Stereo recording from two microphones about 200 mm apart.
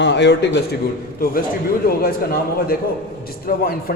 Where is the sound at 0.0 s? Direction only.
60° left (ahead or behind).